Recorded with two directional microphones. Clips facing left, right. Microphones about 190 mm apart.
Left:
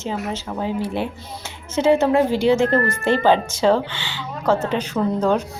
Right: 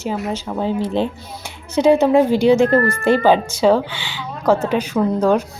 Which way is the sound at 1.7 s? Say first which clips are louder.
Right 3 dB; 15° right (ahead or behind).